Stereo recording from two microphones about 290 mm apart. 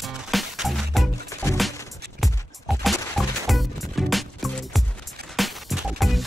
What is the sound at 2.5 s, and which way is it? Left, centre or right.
Music, centre.